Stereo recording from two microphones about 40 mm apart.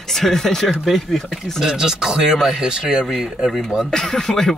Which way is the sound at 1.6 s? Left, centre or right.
Centre.